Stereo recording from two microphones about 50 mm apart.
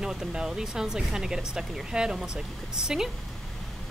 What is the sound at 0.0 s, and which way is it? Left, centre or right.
Speech, centre.